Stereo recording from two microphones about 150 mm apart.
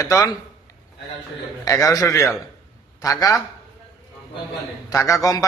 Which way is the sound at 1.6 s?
20° left (ahead or behind).